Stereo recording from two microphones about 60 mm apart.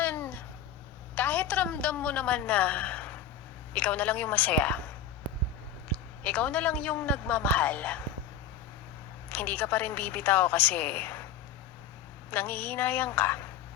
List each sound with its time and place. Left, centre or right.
0.0 s babbling: left
1.1 s a woman's voice: left
5.9 s speech: left
9.3 s a woman's voice: left
12.3 s a woman's voice: left